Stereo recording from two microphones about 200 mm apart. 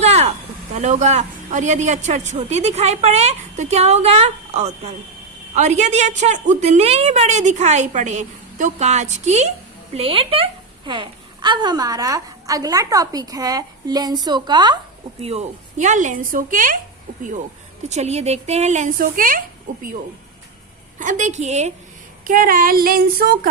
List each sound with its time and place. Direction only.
0.0 s a sound: 35° right (ahead or behind)
0.8 s a woman's voice: 35° right (ahead or behind); by 14.8 s 20° right (ahead or behind)
15.2 s a woman's voice: 30° right (ahead or behind)
17.8 s a woman's voice: 35° right (ahead or behind)
21.0 s a woman's voice: 40° right (ahead or behind)